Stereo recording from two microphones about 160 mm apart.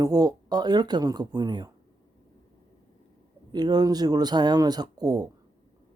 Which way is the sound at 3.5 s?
25° right (ahead or behind).